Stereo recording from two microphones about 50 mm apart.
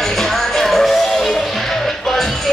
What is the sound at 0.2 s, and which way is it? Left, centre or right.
Music, centre.